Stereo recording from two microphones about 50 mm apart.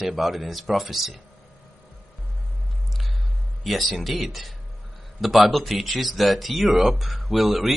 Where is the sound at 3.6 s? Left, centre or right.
Centre.